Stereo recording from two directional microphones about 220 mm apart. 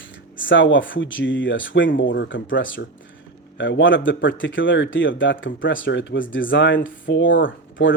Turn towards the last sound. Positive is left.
turn(degrees=60)  # may be behind; listen again after turning